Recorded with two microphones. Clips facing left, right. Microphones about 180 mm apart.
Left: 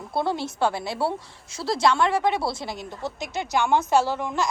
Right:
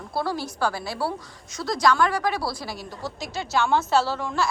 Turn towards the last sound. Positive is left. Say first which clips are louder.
# left 1 dB
turn(degrees=20)  # may be behind; listen again after turning